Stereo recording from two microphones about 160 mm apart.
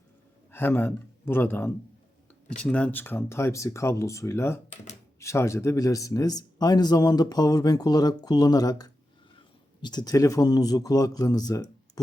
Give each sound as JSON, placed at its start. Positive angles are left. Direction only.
{"t": 0.5, "sound": "a man's voice", "side_deg": 15}